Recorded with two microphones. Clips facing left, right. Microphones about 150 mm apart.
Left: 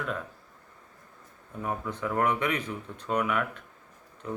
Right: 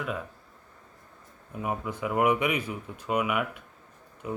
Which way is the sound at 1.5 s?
10° right (ahead or behind).